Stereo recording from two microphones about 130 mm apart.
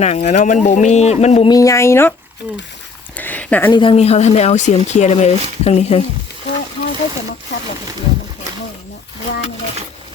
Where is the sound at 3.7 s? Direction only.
40° left (ahead or behind).